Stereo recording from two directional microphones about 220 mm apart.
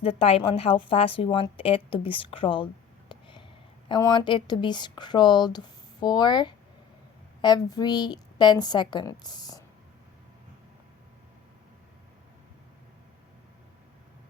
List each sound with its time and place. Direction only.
0.0 s a woman's voice: 25° left (ahead or behind)
3.1 s a sound: 20° left (ahead or behind)
3.8 s a woman's voice: 20° left (ahead or behind)